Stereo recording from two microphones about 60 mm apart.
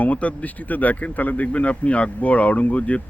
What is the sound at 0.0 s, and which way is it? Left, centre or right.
Speech, left.